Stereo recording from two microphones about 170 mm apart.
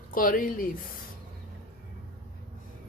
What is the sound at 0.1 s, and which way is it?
Speech, 55° left (ahead or behind).